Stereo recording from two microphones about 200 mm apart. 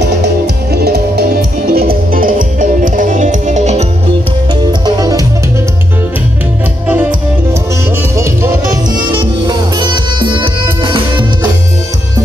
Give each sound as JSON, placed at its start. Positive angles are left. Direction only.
{"t": 0.8, "sound": "music", "side_deg": -50}
{"t": 4.8, "sound": "music", "side_deg": -20}
{"t": 9.1, "sound": "music", "side_deg": -20}